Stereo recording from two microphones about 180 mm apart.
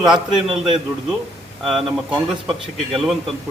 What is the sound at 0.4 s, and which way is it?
Speech, 30° right (ahead or behind).